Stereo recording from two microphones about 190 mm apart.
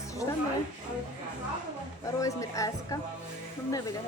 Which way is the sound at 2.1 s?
15° left (ahead or behind).